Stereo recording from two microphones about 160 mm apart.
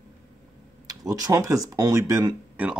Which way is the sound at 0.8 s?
20° right (ahead or behind).